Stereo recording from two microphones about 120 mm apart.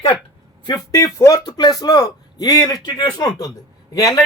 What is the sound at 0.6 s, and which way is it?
Speech, 30° left (ahead or behind).